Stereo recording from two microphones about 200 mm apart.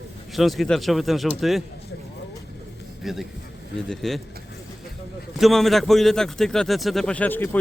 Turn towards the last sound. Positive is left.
turn(degrees=10)  # may be behind; listen again after turning